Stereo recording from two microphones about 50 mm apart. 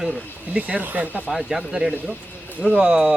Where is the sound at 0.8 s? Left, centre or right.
Right.